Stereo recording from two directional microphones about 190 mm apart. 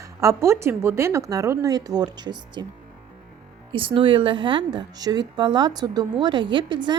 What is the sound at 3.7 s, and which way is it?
A woman's voice, 25° right (ahead or behind).